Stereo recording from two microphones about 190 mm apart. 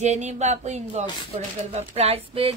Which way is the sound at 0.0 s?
35° right (ahead or behind).